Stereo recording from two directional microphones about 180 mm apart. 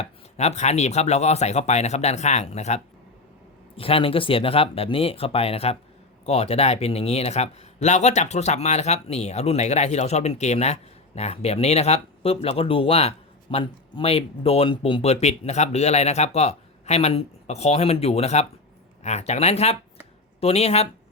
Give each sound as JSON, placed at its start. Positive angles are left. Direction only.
{"t": 0.0, "sound": "a man's voice", "side_deg": 40}